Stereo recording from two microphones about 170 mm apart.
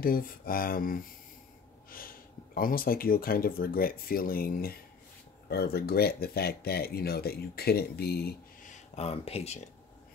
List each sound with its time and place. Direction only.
0.0 s speech: 55° left (ahead or behind)
8.7 s speech: 35° left (ahead or behind)